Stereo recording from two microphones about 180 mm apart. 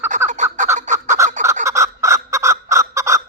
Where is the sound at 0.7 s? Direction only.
15° right (ahead or behind).